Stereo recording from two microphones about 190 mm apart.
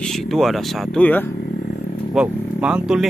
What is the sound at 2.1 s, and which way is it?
Speech, 5° right (ahead or behind).